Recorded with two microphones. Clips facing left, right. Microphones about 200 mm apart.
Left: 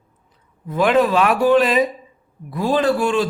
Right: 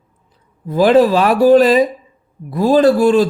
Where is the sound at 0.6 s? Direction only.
35° right (ahead or behind).